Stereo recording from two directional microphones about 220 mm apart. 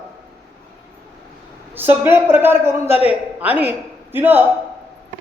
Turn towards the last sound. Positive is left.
turn(degrees=-10)  # may be behind; listen again after turning